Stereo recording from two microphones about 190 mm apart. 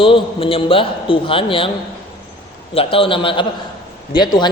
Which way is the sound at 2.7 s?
30° left (ahead or behind).